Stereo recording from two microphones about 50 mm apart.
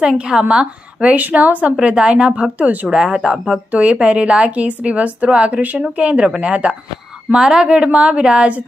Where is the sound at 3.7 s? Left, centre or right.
Right.